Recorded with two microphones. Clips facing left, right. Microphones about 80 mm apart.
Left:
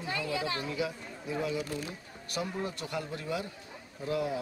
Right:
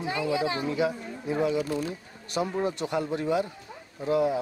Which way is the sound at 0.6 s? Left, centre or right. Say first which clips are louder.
Right 7 dB; right.